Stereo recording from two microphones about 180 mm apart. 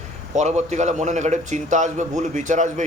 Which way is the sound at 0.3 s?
40° right (ahead or behind).